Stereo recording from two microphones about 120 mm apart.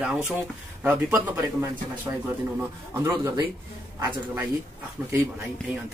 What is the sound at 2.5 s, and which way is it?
A man's voice, 20° right (ahead or behind).